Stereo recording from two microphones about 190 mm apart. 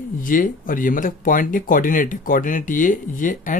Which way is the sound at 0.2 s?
45° left (ahead or behind).